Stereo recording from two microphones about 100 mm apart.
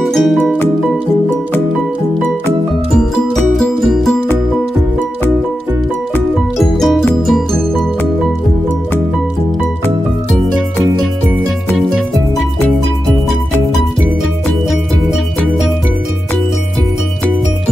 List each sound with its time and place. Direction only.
0.0 s music: centre (ahead or behind)
3.5 s music: centre (ahead or behind)
6.6 s music: 5° left (ahead or behind)